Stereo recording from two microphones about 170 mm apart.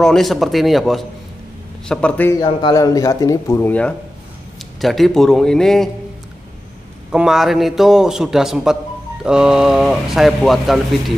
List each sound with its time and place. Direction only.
0.0 s a man's voice: centre (ahead or behind)
2.4 s speech: 25° left (ahead or behind); by 5.9 s 5° left (ahead or behind)
7.1 s speech: 5° right (ahead or behind)